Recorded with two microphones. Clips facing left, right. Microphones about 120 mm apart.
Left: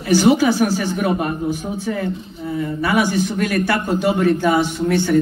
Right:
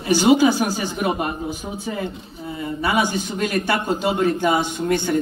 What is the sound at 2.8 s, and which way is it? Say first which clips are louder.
A man's voice: left 2 dB; 20° right (ahead or behind).